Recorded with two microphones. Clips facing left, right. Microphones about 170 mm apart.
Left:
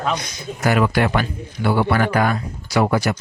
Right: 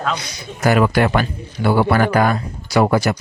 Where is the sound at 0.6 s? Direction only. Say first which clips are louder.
Right 3 dB; 40° right (ahead or behind).